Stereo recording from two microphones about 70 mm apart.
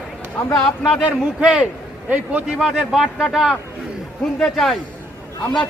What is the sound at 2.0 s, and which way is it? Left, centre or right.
Speech, right.